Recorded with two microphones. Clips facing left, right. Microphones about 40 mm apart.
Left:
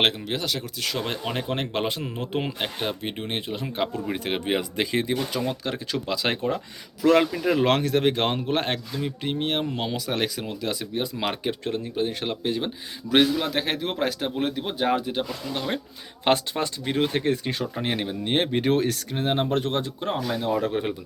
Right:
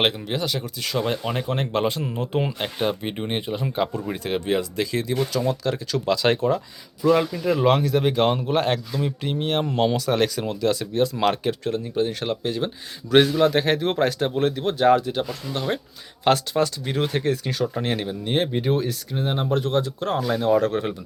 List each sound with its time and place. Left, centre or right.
0.0 s speech: centre; by 6.0 s left
6.1 s speech: centre
7.0 s speech: left
7.3 s speech: left
7.6 s speech: left
9.6 s speech: centre
11.6 s speech: left
13.4 s speech: centre
16.2 s speech: left
17.7 s speech: centre
18.3 s speech: left
20.1 s speech: centre